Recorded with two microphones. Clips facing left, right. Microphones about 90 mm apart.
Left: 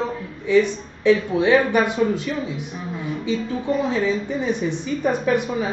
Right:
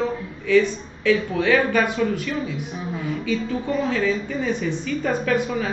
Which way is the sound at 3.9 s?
20° left (ahead or behind).